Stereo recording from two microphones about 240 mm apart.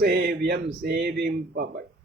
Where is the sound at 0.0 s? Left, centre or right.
Right.